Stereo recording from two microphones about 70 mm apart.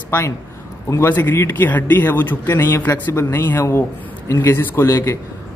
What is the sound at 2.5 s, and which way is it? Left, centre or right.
A man's voice, left.